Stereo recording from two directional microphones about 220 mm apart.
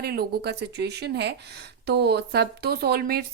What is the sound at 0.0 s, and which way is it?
A woman's voice, 45° right (ahead or behind).